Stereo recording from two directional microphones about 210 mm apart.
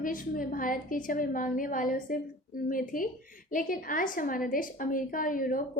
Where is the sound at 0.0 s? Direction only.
40° left (ahead or behind).